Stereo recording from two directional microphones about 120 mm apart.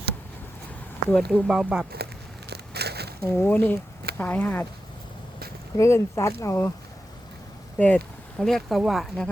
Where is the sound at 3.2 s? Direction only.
15° left (ahead or behind).